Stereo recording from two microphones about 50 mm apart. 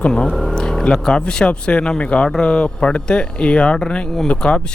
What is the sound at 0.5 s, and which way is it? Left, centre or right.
Speech, centre.